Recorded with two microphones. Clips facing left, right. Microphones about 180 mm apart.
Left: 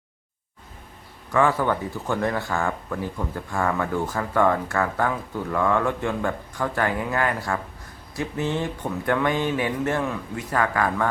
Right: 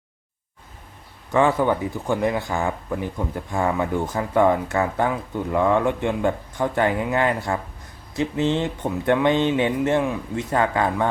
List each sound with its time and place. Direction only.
1.3 s speech: 20° right (ahead or behind)